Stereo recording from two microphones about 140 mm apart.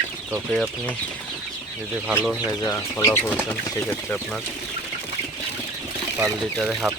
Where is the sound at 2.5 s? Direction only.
25° left (ahead or behind).